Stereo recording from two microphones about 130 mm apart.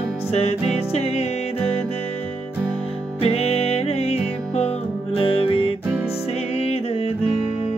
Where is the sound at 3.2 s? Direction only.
50° left (ahead or behind).